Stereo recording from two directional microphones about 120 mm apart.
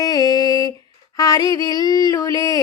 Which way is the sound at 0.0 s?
35° left (ahead or behind).